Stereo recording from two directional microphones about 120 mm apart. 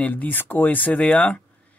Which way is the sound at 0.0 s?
15° left (ahead or behind).